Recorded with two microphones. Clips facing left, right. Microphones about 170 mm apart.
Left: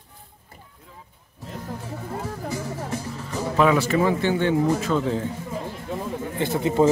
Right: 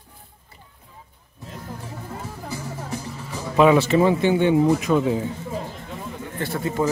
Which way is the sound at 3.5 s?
20° right (ahead or behind).